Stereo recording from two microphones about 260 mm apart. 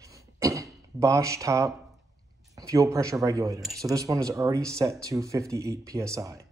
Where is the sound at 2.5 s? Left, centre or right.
Centre.